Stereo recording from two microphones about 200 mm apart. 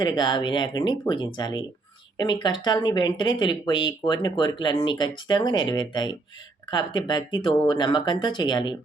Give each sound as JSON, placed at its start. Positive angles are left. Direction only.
{"t": 0.0, "sound": "speech", "side_deg": 20}